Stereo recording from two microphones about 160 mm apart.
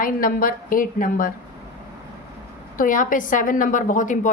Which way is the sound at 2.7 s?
60° left (ahead or behind).